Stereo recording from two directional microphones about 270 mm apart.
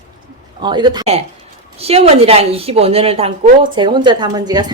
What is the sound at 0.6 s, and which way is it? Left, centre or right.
A woman's voice, centre.